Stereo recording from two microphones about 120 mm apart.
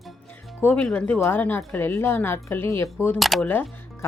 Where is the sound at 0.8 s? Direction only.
10° left (ahead or behind).